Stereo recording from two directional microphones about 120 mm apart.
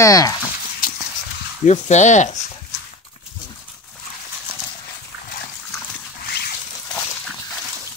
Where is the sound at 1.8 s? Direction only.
80° left.